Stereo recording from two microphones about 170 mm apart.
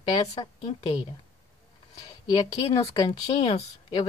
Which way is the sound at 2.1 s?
25° left (ahead or behind).